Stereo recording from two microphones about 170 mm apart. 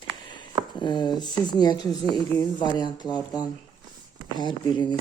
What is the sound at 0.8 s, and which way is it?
Speech, 25° left (ahead or behind).